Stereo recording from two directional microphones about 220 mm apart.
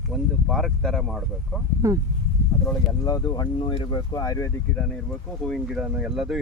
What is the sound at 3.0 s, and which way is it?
Speech, 15° left (ahead or behind).